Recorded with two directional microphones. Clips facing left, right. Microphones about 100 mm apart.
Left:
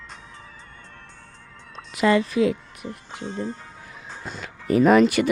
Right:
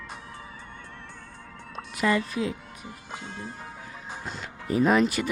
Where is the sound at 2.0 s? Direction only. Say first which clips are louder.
Left 6 dB; 90° left; by 3.0 s 70° left (ahead or behind).